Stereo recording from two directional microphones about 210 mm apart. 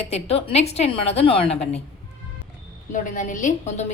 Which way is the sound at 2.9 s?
35° left (ahead or behind).